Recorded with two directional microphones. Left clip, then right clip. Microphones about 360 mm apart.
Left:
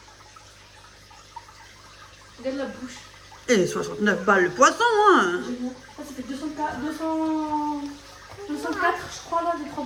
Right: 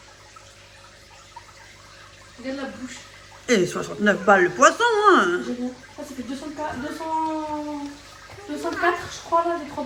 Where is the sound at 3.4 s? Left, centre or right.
Centre.